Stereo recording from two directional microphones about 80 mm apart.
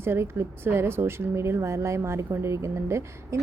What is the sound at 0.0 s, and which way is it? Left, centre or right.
A woman's voice, right.